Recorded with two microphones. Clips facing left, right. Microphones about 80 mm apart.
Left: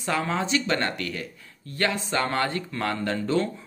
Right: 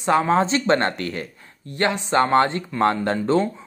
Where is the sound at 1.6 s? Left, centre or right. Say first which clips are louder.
Right 4 dB; right.